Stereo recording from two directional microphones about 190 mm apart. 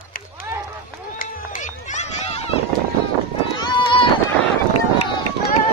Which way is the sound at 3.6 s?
25° left (ahead or behind).